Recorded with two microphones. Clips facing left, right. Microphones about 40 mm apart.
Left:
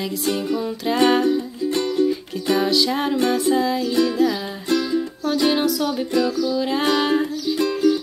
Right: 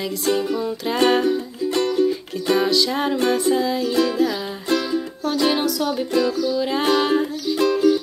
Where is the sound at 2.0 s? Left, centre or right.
Centre.